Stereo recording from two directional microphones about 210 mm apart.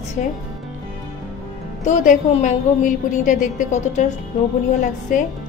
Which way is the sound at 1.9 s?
35° left (ahead or behind).